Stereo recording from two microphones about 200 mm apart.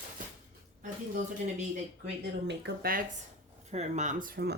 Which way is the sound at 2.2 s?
60° right (ahead or behind).